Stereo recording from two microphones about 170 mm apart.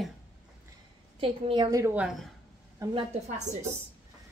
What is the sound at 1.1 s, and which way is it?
Speech, 30° right (ahead or behind).